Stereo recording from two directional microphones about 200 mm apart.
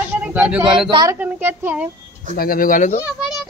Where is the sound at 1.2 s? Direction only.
10° right (ahead or behind).